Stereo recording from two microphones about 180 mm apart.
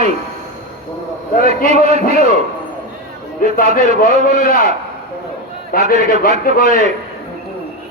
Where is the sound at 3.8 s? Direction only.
50° left (ahead or behind).